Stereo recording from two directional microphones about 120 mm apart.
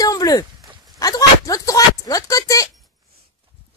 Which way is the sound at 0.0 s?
30° left (ahead or behind).